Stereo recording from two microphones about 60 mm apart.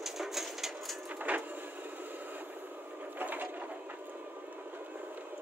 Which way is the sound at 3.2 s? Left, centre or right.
Right.